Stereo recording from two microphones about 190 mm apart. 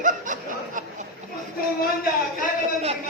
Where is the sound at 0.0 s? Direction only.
45° right (ahead or behind).